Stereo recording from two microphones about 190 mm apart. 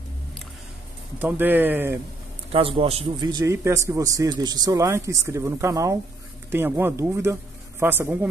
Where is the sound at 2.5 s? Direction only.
30° right (ahead or behind).